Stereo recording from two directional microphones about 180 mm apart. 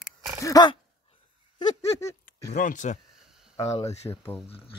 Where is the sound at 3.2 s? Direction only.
5° right (ahead or behind).